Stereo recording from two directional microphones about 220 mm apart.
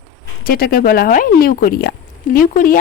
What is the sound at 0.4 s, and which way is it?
Speech, 40° left (ahead or behind).